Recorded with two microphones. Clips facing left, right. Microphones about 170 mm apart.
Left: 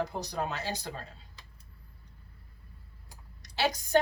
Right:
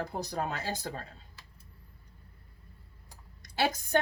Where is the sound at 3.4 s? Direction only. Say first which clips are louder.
Even; 50° right (ahead or behind).